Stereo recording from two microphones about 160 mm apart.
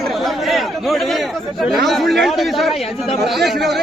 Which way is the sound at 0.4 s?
Centre (ahead or behind).